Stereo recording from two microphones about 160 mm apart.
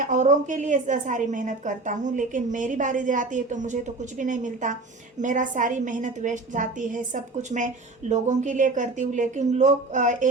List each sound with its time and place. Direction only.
0.0 s a woman's voice: 50° right (ahead or behind)